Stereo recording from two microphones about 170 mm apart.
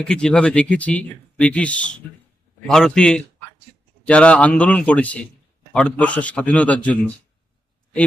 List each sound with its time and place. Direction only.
0.0 s a man's voice: 5° left (ahead or behind)